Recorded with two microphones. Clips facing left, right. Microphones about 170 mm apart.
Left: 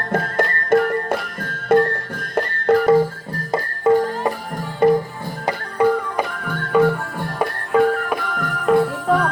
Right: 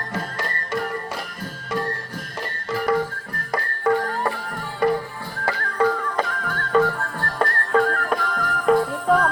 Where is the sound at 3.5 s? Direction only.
20° left (ahead or behind).